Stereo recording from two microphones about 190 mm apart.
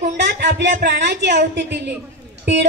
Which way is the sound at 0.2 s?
60° right (ahead or behind).